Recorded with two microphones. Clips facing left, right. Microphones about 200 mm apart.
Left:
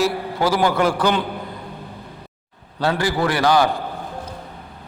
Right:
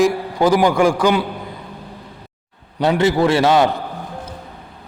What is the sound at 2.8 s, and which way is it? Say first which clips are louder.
Speech: right 5 dB; 20° right (ahead or behind).